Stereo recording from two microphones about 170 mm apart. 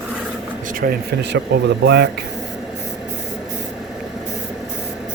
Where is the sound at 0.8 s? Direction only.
70° right (ahead or behind).